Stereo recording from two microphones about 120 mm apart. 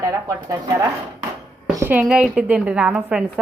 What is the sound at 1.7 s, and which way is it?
A woman's voice, 15° right (ahead or behind).